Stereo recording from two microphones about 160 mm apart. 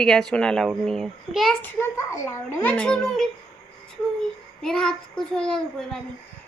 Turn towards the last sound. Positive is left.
turn(degrees=5)  # may be behind; listen again after turning